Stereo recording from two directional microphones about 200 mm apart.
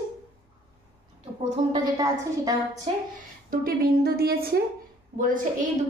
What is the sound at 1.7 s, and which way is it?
A woman's voice, 15° right (ahead or behind).